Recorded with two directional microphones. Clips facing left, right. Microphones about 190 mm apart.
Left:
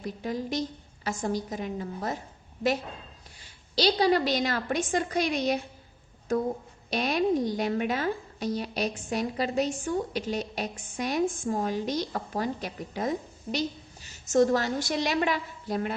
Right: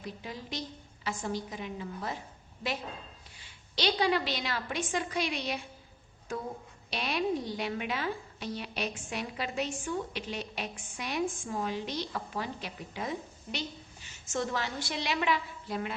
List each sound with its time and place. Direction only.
0.0 s a woman's voice: 45° left (ahead or behind)
3.3 s a woman's voice: 40° left (ahead or behind)